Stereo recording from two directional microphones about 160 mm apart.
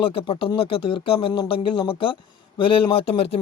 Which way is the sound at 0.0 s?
35° left (ahead or behind).